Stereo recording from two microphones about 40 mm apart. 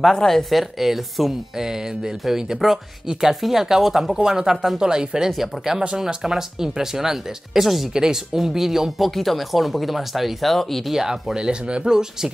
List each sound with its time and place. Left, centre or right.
0.0 s speech: centre
0.5 s speech: centre
5.3 s speech: centre
10.9 s speech: centre
11.3 s a man's voice: right